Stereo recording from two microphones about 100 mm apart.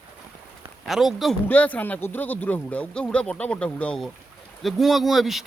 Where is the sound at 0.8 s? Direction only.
5° right (ahead or behind).